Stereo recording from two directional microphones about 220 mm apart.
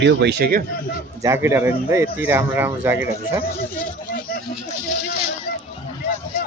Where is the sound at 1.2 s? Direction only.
10° right (ahead or behind).